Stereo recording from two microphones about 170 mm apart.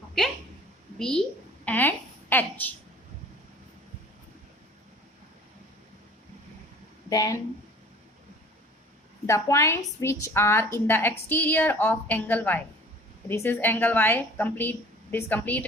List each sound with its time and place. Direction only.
0.9 s a woman's voice: 5° left (ahead or behind)
1.6 s a sound: 10° left (ahead or behind)
7.1 s speech: 20° left (ahead or behind)
9.2 s a woman's voice: 15° left (ahead or behind)